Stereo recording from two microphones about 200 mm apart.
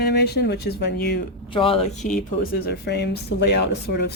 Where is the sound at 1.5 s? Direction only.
25° left (ahead or behind); by 4.1 s 55° left (ahead or behind).